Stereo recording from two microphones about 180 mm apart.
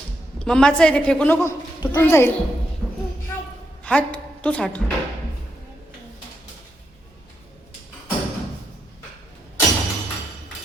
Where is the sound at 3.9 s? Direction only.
5° left (ahead or behind).